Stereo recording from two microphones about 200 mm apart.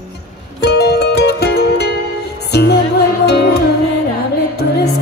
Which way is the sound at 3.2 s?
55° left (ahead or behind).